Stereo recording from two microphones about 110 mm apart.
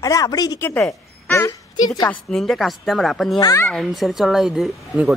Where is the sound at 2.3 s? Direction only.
Centre (ahead or behind).